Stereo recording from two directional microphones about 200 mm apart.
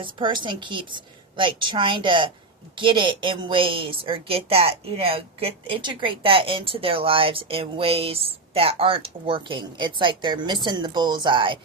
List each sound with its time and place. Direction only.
0.0 s a woman's voice: 25° right (ahead or behind)